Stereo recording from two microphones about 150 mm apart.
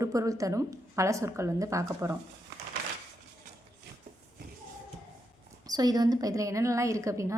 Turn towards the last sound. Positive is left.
turn(degrees=-20)  # may be behind; listen again after turning